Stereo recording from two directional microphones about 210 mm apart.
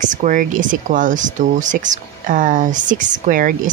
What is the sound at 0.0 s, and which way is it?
Speech, 35° right (ahead or behind).